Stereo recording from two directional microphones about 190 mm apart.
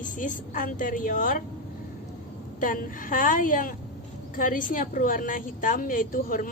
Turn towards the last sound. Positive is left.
turn(degrees=45)  # may be behind; listen again after turning